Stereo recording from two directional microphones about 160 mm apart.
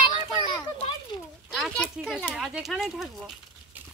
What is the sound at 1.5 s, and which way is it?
Speech, centre (ahead or behind).